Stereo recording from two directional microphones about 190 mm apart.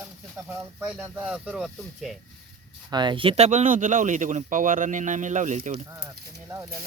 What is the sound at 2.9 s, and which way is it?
Speech, 25° right (ahead or behind).